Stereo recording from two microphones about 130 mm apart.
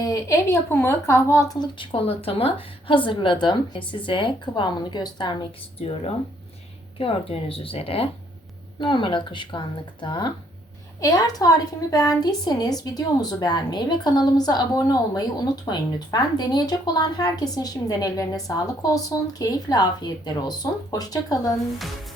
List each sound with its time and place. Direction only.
0.0 s a woman's voice: 25° left (ahead or behind)
7.0 s speech: 45° left (ahead or behind)
8.8 s a woman's voice: 40° left (ahead or behind)